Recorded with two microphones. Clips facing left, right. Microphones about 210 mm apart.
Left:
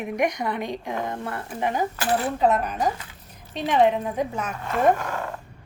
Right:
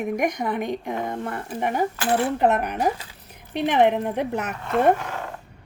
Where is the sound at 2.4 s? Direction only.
65° right (ahead or behind).